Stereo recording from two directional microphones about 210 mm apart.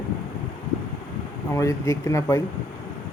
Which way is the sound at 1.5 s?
15° left (ahead or behind).